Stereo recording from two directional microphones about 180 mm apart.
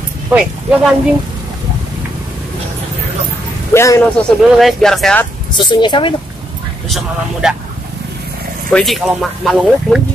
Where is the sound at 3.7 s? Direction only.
15° left (ahead or behind).